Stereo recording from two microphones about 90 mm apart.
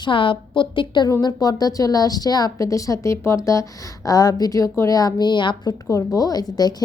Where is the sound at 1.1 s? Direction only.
45° left (ahead or behind).